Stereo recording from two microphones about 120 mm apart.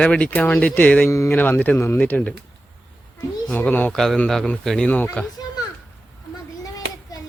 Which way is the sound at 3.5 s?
15° left (ahead or behind).